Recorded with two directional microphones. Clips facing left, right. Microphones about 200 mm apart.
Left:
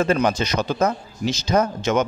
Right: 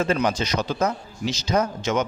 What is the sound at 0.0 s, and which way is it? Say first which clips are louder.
A man's voice: left 3 dB; 50° left (ahead or behind).